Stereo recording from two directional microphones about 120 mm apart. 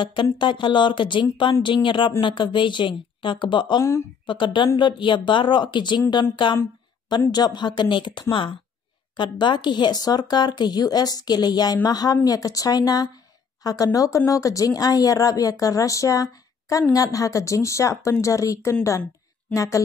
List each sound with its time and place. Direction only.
0.0 s speech: 45° left (ahead or behind); by 19.8 s 25° left (ahead or behind)